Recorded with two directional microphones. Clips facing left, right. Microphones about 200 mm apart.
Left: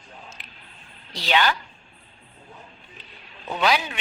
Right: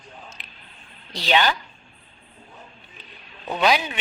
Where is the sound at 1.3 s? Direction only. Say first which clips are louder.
Right 1 dB; 20° right (ahead or behind).